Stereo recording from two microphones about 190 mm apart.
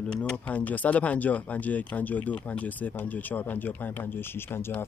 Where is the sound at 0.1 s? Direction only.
5° left (ahead or behind).